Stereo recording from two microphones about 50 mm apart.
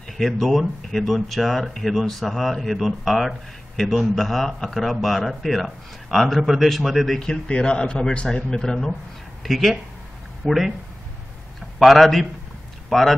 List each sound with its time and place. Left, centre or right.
0.2 s speech: centre
7.2 s a man's voice: left
9.4 s speech: centre
11.8 s speech: centre